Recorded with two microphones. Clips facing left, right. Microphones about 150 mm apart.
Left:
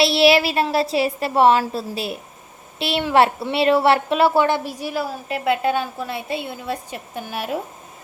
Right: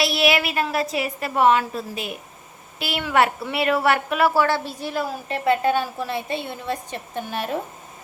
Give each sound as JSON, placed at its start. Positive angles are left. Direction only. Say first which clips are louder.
{"t": 0.0, "sound": "a woman's voice", "louder": "left 5 dB", "side_deg": 30}